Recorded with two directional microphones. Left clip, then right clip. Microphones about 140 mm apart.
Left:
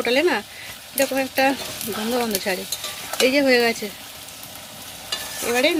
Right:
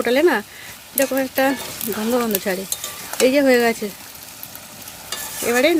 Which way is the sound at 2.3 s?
55° right (ahead or behind).